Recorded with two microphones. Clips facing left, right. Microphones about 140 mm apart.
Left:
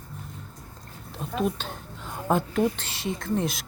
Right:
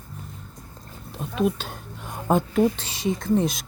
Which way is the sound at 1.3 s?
10° right (ahead or behind).